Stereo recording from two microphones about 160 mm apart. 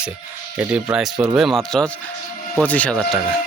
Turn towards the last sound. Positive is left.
turn(degrees=5)  # may be behind; listen again after turning